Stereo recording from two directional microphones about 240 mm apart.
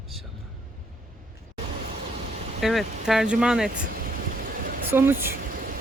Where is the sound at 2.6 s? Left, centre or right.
Centre.